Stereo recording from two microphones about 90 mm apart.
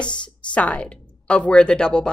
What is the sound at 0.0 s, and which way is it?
Speech, 10° left (ahead or behind).